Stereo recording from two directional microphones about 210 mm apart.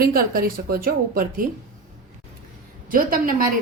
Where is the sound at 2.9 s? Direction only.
40° right (ahead or behind).